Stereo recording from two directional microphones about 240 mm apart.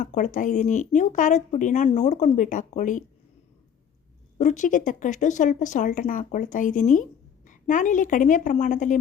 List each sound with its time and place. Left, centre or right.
0.0 s speech: left
4.4 s speech: left